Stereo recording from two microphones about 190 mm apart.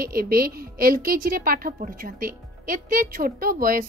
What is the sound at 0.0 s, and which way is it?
A woman's voice, 50° right (ahead or behind).